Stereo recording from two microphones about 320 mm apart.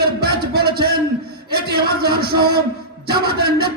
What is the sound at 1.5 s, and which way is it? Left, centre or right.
A man's voice, right.